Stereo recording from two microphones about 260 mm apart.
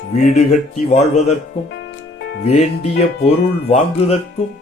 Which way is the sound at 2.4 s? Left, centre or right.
Left.